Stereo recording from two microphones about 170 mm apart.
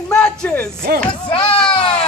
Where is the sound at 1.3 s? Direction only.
30° left (ahead or behind).